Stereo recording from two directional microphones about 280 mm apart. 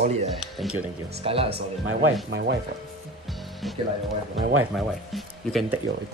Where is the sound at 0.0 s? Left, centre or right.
Right.